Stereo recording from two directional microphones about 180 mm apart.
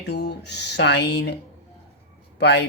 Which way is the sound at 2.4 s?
70° left (ahead or behind).